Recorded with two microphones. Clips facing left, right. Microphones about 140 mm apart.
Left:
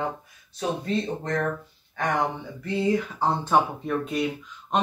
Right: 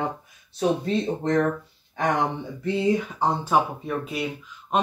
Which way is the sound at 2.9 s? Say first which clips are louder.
Right 1 dB; 10° right (ahead or behind).